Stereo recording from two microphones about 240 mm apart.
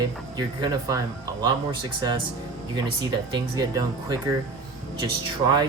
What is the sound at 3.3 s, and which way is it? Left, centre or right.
Speech, centre.